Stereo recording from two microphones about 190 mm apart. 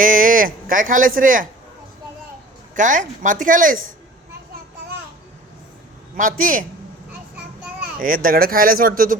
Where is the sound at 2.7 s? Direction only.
45° right (ahead or behind).